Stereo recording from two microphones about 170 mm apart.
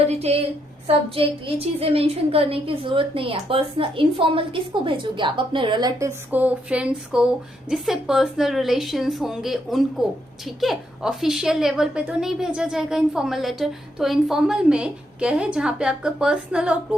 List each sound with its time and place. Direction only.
0.0 s a woman's voice: 40° right (ahead or behind); by 16.7 s 5° right (ahead or behind)